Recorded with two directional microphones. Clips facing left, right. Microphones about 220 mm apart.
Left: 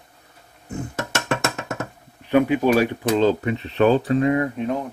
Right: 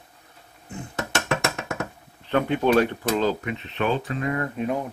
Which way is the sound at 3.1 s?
30° left (ahead or behind).